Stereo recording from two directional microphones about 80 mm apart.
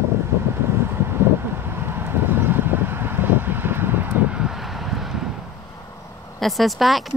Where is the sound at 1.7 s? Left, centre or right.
Right.